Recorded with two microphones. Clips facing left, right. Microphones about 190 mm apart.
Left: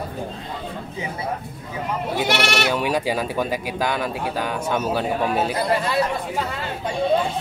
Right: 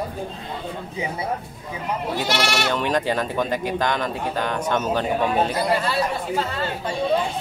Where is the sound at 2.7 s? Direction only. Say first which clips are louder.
Even; 10° left (ahead or behind).